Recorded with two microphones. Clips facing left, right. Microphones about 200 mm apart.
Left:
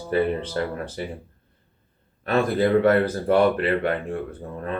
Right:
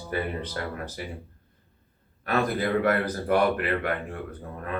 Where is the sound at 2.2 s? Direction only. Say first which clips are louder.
Left 5 dB; 25° left (ahead or behind).